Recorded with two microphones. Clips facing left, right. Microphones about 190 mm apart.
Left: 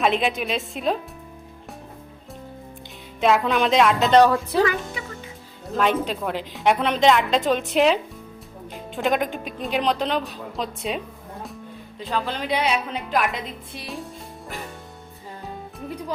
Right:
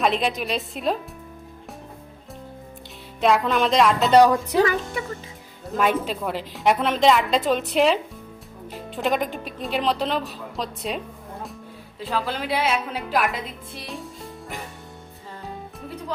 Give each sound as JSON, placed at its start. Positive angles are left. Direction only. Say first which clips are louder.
{"t": 0.0, "sound": "a woman's voice", "louder": "left 1 dB", "side_deg": 0}
{"t": 3.2, "sound": "a woman's voice", "louder": "even", "side_deg": 0}
{"t": 4.1, "sound": "speech", "louder": "right 2 dB", "side_deg": -15}
{"t": 5.7, "sound": "a woman's voice", "louder": "even", "side_deg": -5}